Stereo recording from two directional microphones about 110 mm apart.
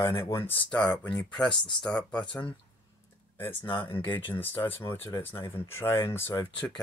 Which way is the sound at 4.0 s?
20° left (ahead or behind).